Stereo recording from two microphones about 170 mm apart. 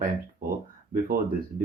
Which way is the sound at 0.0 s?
50° right (ahead or behind).